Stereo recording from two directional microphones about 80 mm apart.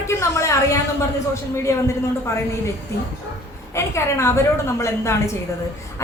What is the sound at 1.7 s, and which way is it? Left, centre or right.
Speech, left.